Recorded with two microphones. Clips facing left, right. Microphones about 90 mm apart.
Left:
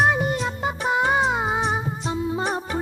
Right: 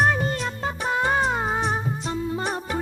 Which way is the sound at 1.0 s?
5° left (ahead or behind).